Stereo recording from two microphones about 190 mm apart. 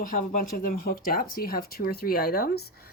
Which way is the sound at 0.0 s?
45° left (ahead or behind).